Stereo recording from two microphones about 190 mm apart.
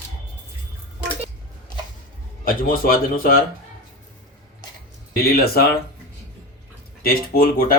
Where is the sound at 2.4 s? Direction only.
50° left (ahead or behind).